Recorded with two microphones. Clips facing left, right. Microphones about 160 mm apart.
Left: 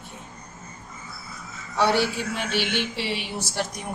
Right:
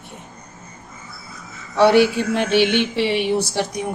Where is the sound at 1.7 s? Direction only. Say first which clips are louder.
Right 9 dB; 65° right (ahead or behind).